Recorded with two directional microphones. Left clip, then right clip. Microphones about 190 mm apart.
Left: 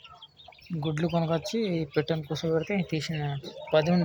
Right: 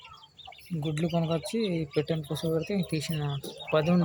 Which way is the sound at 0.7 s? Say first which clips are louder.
Left 2 dB; 10° right (ahead or behind).